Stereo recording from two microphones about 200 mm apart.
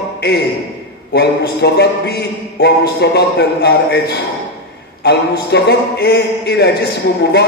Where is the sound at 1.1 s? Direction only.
55° left (ahead or behind).